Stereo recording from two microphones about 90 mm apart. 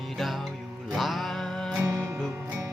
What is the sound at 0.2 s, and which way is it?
Music, centre (ahead or behind).